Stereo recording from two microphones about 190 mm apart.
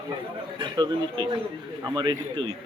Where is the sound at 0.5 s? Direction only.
25° right (ahead or behind).